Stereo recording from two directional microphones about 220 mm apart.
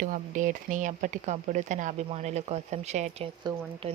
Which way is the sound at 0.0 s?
35° right (ahead or behind).